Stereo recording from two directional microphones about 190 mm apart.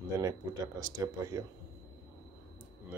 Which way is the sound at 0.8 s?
20° right (ahead or behind).